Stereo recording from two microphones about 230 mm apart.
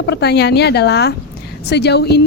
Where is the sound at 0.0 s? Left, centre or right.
Left.